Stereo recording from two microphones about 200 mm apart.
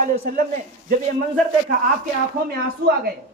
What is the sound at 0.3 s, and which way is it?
Speech, 40° right (ahead or behind).